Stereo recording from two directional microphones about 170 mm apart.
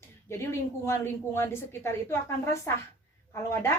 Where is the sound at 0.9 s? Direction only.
15° left (ahead or behind).